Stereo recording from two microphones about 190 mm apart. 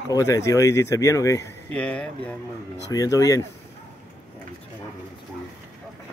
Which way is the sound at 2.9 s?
20° left (ahead or behind).